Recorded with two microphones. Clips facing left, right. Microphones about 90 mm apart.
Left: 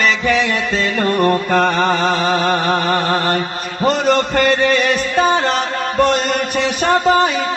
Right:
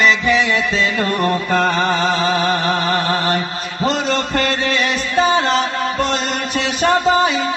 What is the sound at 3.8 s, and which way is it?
Music, 50° left (ahead or behind).